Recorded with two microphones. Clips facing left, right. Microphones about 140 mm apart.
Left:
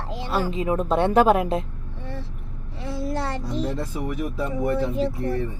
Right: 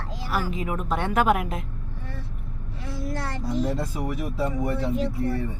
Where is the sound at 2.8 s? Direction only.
25° left (ahead or behind).